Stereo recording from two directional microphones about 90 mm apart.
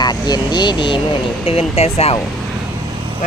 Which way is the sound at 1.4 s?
90° left.